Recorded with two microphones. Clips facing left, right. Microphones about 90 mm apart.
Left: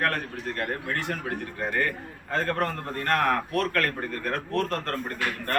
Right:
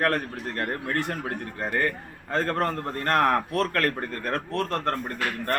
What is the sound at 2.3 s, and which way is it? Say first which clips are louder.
A man's voice: right 2 dB; 35° right (ahead or behind).